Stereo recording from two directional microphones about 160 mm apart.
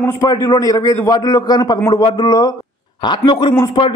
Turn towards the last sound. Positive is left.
turn(degrees=25)  # may be behind; listen again after turning